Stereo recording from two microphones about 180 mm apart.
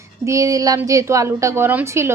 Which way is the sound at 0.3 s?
20° right (ahead or behind).